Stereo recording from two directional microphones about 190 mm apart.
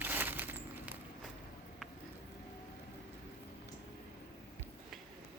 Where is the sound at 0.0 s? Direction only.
10° right (ahead or behind).